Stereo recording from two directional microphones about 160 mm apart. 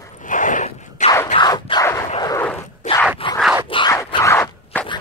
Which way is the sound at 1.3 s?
25° left (ahead or behind).